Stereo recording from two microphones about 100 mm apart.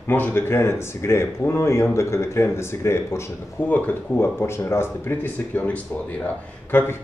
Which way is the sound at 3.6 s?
15° left (ahead or behind).